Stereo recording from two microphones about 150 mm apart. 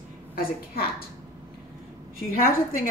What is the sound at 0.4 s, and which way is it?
Speech, 85° left.